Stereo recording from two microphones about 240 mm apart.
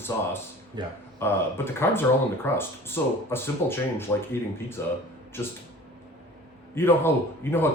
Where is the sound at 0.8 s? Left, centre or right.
Centre.